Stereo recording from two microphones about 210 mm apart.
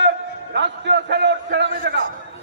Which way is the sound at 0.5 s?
55° right (ahead or behind).